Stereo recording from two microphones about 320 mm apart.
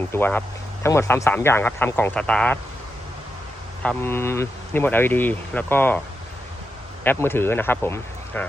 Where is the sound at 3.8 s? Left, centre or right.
Centre.